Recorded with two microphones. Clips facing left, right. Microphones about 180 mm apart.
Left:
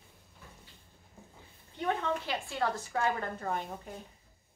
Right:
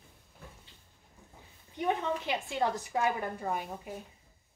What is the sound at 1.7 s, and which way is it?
A woman's voice, 15° right (ahead or behind).